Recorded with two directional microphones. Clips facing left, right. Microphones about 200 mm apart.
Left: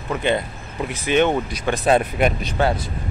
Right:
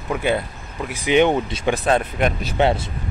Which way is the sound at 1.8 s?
5° left (ahead or behind).